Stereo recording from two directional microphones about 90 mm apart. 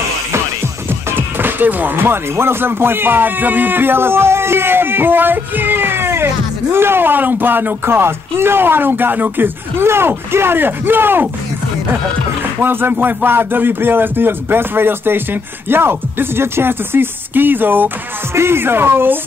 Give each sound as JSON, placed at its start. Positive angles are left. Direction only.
{"t": 1.1, "sound": "speech", "side_deg": -20}
{"t": 12.6, "sound": "speech", "side_deg": -20}